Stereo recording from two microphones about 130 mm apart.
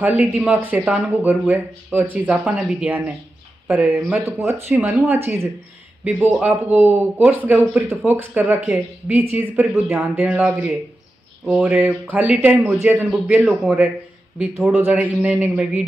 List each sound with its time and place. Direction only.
0.0 s speech: 10° right (ahead or behind)
11.4 s speech: centre (ahead or behind)
13.5 s speech: 5° right (ahead or behind)
14.9 s speech: 10° right (ahead or behind)